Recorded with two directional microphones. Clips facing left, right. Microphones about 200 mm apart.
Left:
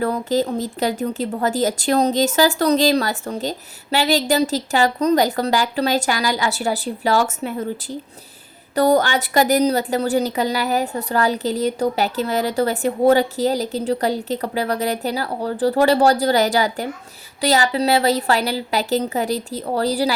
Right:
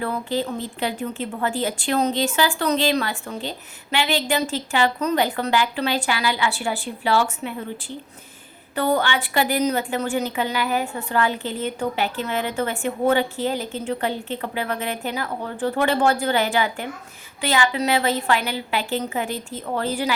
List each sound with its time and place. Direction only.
0.0 s speech: 40° left (ahead or behind)